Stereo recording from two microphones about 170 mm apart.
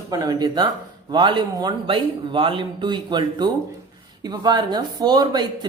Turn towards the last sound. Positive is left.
turn(degrees=-25)  # may be behind; listen again after turning